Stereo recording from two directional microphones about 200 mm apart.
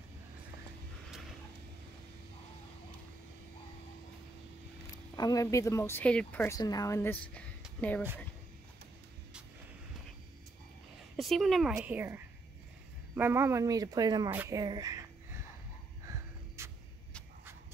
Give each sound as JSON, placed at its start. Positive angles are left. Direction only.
{"t": 5.1, "sound": "speech", "side_deg": 20}
{"t": 11.1, "sound": "speech", "side_deg": 0}
{"t": 16.1, "sound": "a sound", "side_deg": -15}